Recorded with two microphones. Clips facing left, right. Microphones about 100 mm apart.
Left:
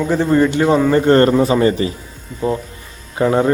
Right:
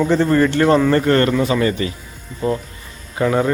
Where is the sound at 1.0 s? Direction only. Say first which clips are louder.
Left 4 dB; 30° left (ahead or behind).